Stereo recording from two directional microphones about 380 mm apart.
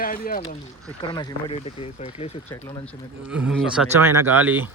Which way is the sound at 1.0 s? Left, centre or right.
Centre.